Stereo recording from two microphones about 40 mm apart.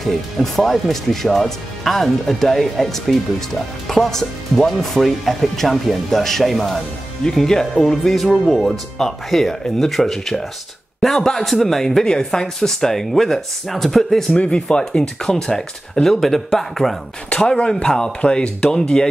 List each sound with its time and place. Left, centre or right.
0.0 s speech: centre
7.2 s speech: centre
14.3 s speech: left; by 16.9 s centre
17.3 s speech: left
17.8 s speech: centre